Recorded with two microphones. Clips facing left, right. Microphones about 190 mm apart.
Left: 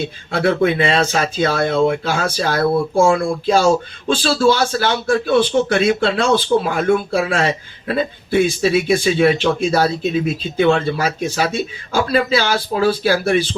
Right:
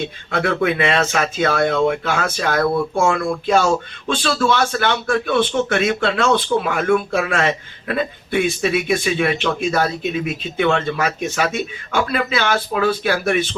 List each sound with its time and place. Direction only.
0.3 s speech: 30° left (ahead or behind)